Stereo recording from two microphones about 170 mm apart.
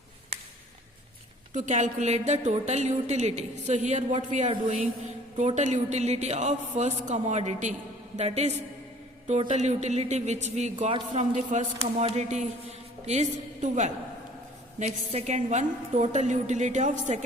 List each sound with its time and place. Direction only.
1.5 s a woman's voice: 45° right (ahead or behind)